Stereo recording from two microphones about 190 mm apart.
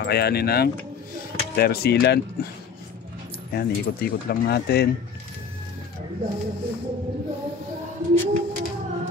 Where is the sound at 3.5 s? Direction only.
55° left (ahead or behind).